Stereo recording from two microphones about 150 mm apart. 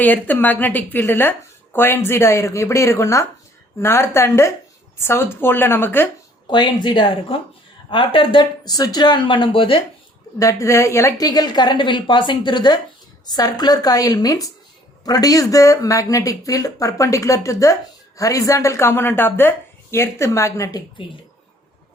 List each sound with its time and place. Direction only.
0.0 s speech: 10° left (ahead or behind)
6.5 s speech: 30° left (ahead or behind)
10.3 s speech: 20° left (ahead or behind)